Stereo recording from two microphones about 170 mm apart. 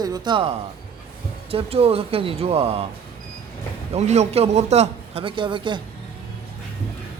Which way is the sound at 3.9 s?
40° right (ahead or behind).